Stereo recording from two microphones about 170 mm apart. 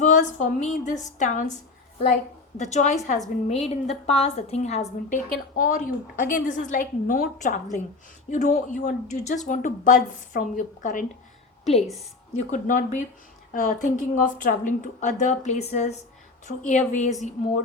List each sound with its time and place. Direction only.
0.0 s a woman's voice: 45° left (ahead or behind)
2.6 s a woman's voice: 45° left (ahead or behind)
11.6 s a woman's voice: 40° left (ahead or behind)